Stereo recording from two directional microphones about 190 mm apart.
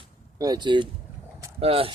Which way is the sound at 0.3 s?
20° right (ahead or behind).